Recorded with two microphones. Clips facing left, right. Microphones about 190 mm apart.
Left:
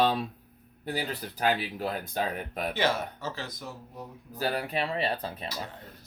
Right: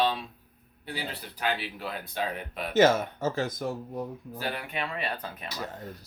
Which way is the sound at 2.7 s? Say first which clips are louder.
Right 9 dB; 45° right (ahead or behind).